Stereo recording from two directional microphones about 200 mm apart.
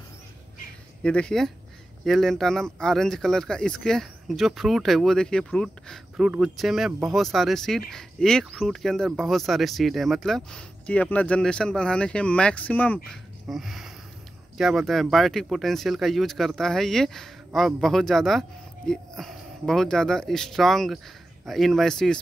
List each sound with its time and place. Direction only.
1.0 s speech: 5° left (ahead or behind)